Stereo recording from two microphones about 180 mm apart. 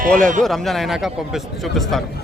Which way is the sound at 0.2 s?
45° right (ahead or behind).